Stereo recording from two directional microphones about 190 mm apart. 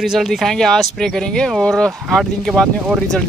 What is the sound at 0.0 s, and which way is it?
Speech, centre (ahead or behind).